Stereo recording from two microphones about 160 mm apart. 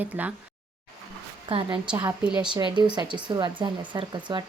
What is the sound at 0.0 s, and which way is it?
Speech, 10° right (ahead or behind).